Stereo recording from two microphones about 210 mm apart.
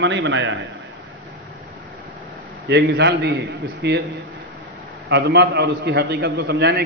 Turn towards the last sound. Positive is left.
turn(degrees=-50)  # may be behind; listen again after turning